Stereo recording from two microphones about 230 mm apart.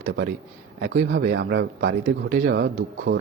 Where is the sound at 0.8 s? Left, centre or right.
Right.